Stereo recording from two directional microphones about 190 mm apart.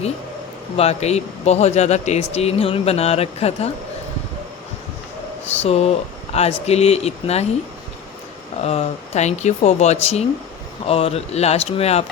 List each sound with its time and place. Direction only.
0.8 s speech: 35° left (ahead or behind)
5.6 s speech: 35° left (ahead or behind)
8.6 s speech: 35° left (ahead or behind)